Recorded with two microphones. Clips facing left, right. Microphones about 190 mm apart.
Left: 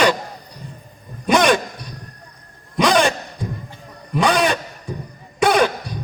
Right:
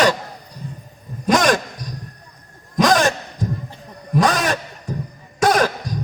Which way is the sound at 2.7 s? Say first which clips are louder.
Even; 40° right (ahead or behind).